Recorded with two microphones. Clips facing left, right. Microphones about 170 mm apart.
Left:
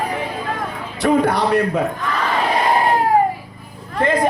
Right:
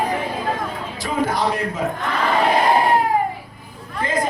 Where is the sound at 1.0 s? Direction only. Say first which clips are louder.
Left 6 dB; 65° left (ahead or behind).